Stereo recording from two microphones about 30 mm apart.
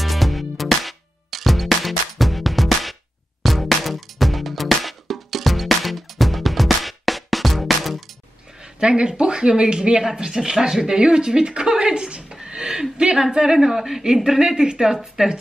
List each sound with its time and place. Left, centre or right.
0.0 s music: centre
8.7 s a woman's voice: right
10.0 s speech: centre
12.4 s a sound: right
12.9 s a woman's voice: right
13.7 s speech: centre